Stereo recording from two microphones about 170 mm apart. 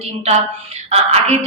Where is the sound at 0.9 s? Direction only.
40° right (ahead or behind).